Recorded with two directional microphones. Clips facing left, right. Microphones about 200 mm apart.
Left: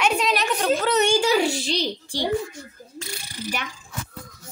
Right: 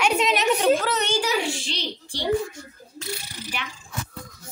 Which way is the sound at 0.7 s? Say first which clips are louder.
Left 4 dB; centre (ahead or behind).